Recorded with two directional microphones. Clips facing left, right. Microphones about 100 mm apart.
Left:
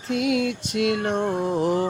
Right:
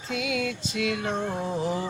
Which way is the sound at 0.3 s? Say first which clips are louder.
Left 6 dB; 60° left (ahead or behind).